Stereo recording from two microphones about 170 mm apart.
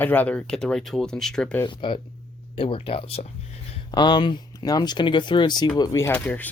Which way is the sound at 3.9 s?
25° left (ahead or behind).